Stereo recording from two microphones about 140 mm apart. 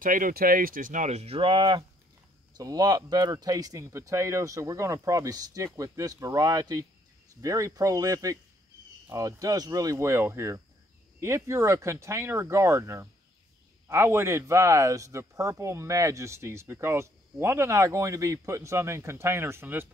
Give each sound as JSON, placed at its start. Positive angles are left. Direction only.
{"t": 0.0, "sound": "speech", "side_deg": -80}